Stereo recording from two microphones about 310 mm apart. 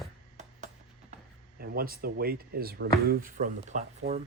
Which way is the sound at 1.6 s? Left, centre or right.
Right.